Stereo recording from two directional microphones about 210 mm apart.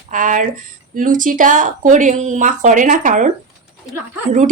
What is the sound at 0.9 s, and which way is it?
Speech, 40° right (ahead or behind).